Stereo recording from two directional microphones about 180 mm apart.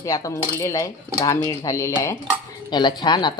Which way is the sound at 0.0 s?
20° left (ahead or behind).